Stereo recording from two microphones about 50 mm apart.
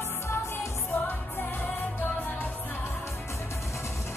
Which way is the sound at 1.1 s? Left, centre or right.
Left.